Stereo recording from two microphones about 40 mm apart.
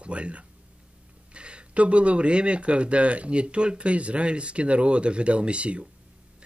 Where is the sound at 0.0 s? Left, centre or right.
Right.